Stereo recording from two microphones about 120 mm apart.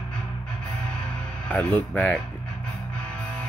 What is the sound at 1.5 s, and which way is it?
Speech, 10° left (ahead or behind).